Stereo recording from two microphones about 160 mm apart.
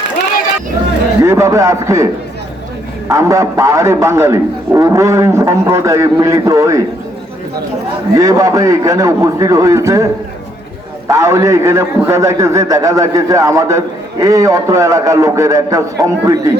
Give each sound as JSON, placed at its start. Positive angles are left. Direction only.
{"t": 1.2, "sound": "a man's voice", "side_deg": -20}
{"t": 3.1, "sound": "a man's voice", "side_deg": -20}
{"t": 8.1, "sound": "a man's voice", "side_deg": -20}
{"t": 11.1, "sound": "a man's voice", "side_deg": -20}